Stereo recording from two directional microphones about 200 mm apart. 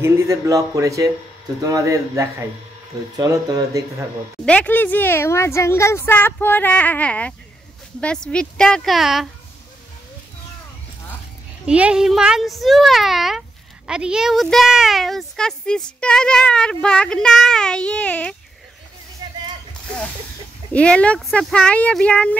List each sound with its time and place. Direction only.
0.0 s speech: 15° right (ahead or behind)
4.5 s a woman's voice: 10° left (ahead or behind)
11.6 s a woman's voice: 5° right (ahead or behind)
19.2 s a sound: 20° right (ahead or behind)
20.7 s a woman's voice: 5° left (ahead or behind)